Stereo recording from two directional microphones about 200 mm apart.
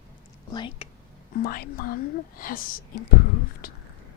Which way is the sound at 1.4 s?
45° left (ahead or behind).